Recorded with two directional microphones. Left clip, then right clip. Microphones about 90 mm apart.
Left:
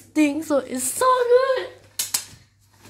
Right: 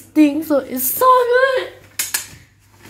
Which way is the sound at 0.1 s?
25° left (ahead or behind).